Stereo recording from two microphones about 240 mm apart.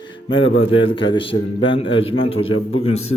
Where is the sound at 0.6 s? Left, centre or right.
Left.